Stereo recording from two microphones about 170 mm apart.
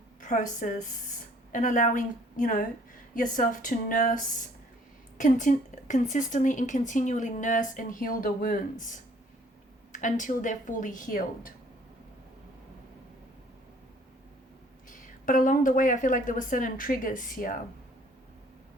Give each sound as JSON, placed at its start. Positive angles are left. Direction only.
{"t": 0.2, "sound": "a woman's voice", "side_deg": 50}
{"t": 14.8, "sound": "a woman's voice", "side_deg": 50}